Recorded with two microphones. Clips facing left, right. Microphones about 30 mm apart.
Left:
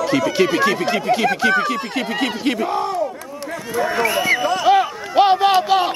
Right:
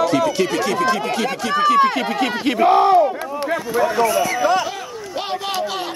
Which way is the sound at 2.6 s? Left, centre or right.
Right.